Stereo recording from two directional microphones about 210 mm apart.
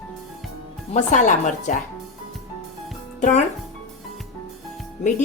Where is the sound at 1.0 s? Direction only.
35° left (ahead or behind).